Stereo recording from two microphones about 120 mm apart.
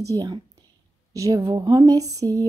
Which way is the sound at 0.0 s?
30° right (ahead or behind).